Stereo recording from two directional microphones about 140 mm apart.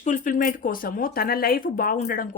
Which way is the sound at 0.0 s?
65° left (ahead or behind).